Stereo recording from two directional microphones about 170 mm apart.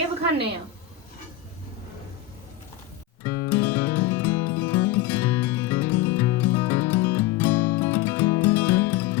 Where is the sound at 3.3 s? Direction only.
20° left (ahead or behind).